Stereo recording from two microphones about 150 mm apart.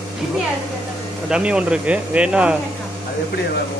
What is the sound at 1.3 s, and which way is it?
Speech, 5° right (ahead or behind).